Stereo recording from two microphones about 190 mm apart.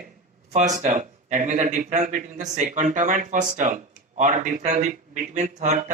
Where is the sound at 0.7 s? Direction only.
40° right (ahead or behind).